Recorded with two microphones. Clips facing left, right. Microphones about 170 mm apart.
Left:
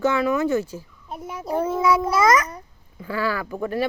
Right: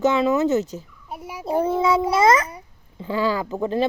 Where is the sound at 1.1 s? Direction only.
10° right (ahead or behind).